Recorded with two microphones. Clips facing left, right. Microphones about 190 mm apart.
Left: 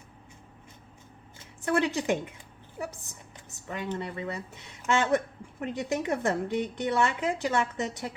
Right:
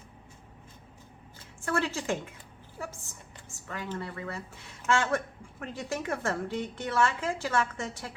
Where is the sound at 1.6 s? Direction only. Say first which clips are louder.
Left 4 dB; 15° left (ahead or behind).